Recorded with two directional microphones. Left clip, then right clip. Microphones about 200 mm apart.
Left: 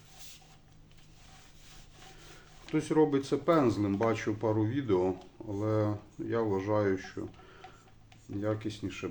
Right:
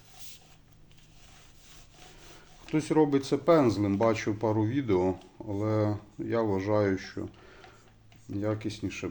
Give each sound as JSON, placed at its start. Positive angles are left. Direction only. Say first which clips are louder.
{"t": 2.7, "sound": "speech", "louder": "right 2 dB", "side_deg": -35}